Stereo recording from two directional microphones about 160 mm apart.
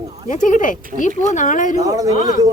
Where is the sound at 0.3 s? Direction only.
55° left (ahead or behind).